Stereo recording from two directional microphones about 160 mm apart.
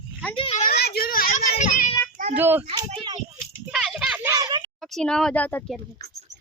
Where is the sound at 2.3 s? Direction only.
10° right (ahead or behind).